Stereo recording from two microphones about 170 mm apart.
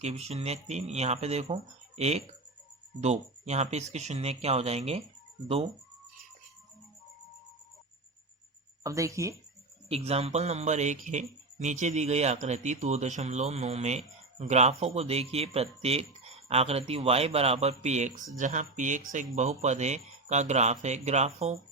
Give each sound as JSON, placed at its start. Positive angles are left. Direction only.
{"t": 0.0, "sound": "speech", "side_deg": -40}
{"t": 8.8, "sound": "speech", "side_deg": -20}
{"t": 9.9, "sound": "speech", "side_deg": -35}